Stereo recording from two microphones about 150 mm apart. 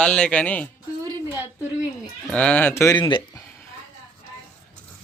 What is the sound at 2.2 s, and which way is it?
Speech, 10° left (ahead or behind).